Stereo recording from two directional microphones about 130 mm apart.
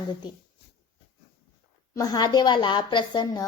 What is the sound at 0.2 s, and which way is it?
Speech, 30° left (ahead or behind).